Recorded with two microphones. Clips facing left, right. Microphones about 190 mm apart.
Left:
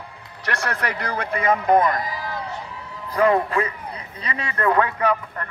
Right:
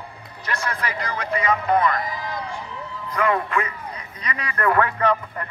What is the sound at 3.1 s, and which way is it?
Speech, 35° left (ahead or behind).